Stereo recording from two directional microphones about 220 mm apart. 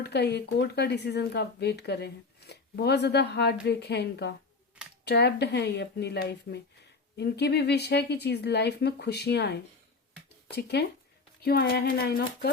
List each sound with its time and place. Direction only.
0.1 s speech: 50° left (ahead or behind)